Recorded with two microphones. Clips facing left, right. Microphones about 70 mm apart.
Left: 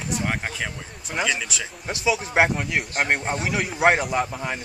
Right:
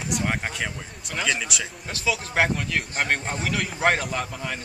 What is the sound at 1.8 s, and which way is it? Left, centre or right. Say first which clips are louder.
A man's voice: left 4 dB; centre.